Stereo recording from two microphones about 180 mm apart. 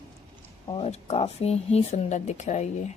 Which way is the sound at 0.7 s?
35° left (ahead or behind).